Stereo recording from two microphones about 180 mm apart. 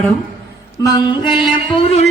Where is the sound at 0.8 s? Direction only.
25° left (ahead or behind).